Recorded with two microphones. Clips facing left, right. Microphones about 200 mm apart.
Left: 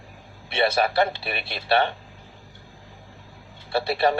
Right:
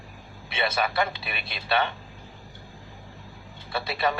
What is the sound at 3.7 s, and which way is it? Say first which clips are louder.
Speech: left 6 dB; 30° left (ahead or behind).